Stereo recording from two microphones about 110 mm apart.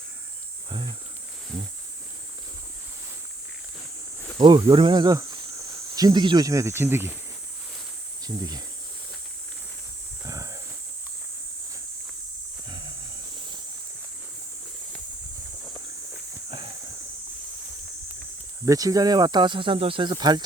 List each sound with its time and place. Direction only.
0.7 s speech: 45° right (ahead or behind)
4.4 s speech: 40° right (ahead or behind); by 7.1 s 20° right (ahead or behind)
8.2 s speech: 35° right (ahead or behind)
10.2 s a sound: 30° right (ahead or behind)
12.6 s wild animals: 45° right (ahead or behind)
18.6 s speech: 30° right (ahead or behind)